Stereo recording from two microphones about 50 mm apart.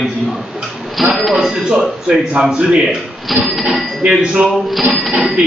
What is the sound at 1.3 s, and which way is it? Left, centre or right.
Speech, centre.